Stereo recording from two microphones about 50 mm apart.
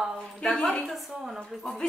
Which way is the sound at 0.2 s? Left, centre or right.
Centre.